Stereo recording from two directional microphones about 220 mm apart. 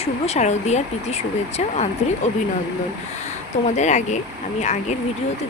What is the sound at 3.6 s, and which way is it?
Speech, 30° left (ahead or behind).